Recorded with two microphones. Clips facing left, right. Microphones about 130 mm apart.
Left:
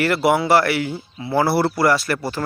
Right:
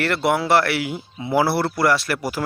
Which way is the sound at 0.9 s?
15° right (ahead or behind).